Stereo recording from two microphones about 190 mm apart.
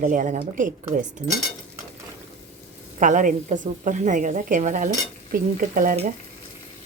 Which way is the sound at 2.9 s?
40° right (ahead or behind).